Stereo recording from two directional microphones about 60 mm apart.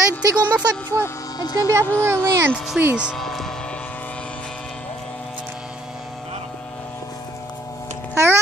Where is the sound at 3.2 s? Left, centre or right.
Centre.